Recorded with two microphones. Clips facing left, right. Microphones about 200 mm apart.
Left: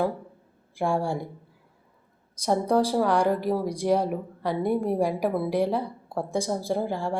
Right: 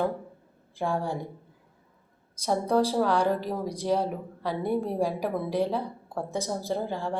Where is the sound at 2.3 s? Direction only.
15° left (ahead or behind).